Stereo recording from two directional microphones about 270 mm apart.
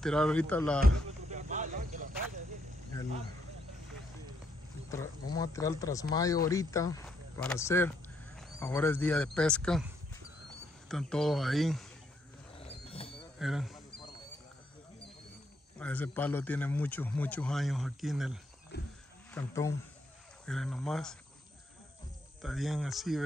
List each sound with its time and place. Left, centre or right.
0.0 s a man's voice: centre
0.8 s a sound: right
5.3 s a man's voice: centre
12.5 s a sound: left
13.4 s a man's voice: centre
15.8 s a man's voice: centre
18.7 s wild animals: left
19.3 s a man's voice: centre
22.4 s a man's voice: centre